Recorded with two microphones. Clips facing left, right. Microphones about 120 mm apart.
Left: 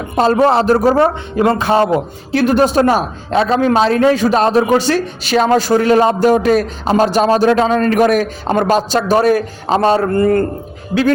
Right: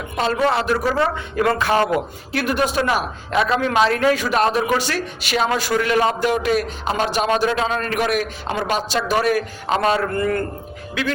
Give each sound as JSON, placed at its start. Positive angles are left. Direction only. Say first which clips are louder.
{"t": 0.0, "sound": "a man's voice", "louder": "left 8 dB", "side_deg": 40}
{"t": 1.4, "sound": "a man's voice", "louder": "left 5 dB", "side_deg": 25}